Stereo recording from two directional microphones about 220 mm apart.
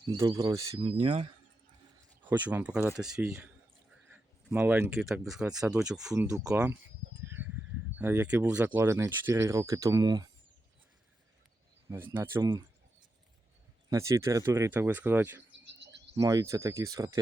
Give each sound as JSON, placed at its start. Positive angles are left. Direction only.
{"t": 0.0, "sound": "speech", "side_deg": -20}
{"t": 2.2, "sound": "speech", "side_deg": -5}
{"t": 6.5, "sound": "a sound", "side_deg": -10}
{"t": 7.9, "sound": "speech", "side_deg": -5}
{"t": 11.9, "sound": "speech", "side_deg": -10}
{"t": 13.9, "sound": "speech", "side_deg": -15}
{"t": 15.6, "sound": "a sound", "side_deg": -50}
{"t": 16.1, "sound": "speech", "side_deg": -15}